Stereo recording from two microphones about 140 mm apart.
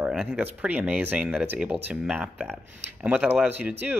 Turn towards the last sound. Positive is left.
turn(degrees=-10)  # may be behind; listen again after turning